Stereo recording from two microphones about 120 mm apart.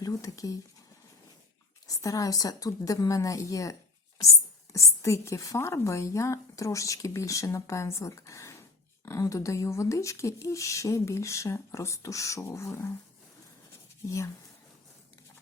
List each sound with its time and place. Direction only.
0.0 s a woman's voice: 30° left (ahead or behind)
1.9 s a woman's voice: 25° left (ahead or behind)